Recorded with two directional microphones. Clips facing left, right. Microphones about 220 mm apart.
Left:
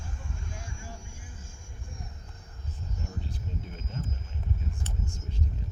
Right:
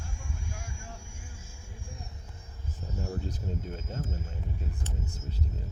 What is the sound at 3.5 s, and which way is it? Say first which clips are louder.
Speech: right 4 dB; 45° right (ahead or behind).